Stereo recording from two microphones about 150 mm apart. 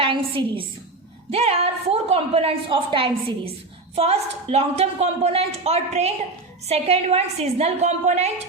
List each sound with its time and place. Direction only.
0.0 s a woman's voice: 35° right (ahead or behind)